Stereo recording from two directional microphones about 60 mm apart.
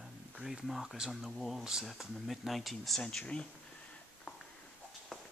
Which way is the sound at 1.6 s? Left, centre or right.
Centre.